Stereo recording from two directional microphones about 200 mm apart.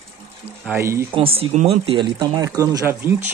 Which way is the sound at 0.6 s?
15° right (ahead or behind).